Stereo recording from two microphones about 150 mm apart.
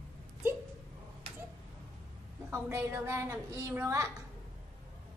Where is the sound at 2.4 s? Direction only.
15° right (ahead or behind).